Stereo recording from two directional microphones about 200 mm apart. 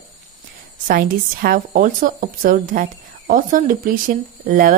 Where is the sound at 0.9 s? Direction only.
45° right (ahead or behind).